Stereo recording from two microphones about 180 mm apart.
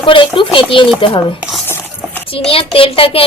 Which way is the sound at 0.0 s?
30° left (ahead or behind).